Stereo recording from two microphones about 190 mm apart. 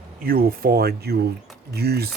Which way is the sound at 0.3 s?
50° right (ahead or behind).